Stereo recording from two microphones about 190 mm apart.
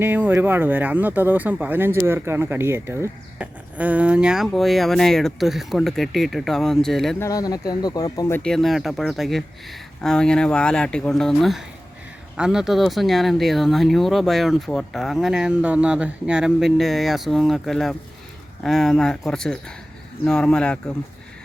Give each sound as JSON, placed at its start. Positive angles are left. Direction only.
{"t": 0.0, "sound": "speech", "side_deg": -10}
{"t": 7.2, "sound": "speech", "side_deg": 20}
{"t": 8.4, "sound": "speech", "side_deg": 5}